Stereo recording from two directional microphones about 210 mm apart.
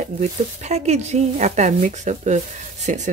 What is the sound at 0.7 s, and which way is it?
Speech, 30° right (ahead or behind).